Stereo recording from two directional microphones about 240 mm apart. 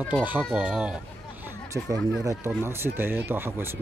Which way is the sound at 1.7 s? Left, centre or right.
Centre.